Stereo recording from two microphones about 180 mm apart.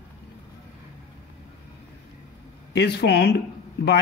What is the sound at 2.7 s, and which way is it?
Speech, 70° left (ahead or behind).